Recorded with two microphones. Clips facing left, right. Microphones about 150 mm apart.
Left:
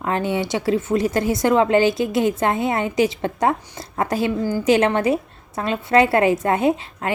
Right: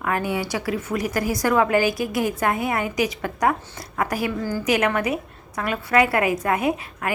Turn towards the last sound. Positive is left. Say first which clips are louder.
# left 4 dB
turn(degrees=25)  # may be behind; listen again after turning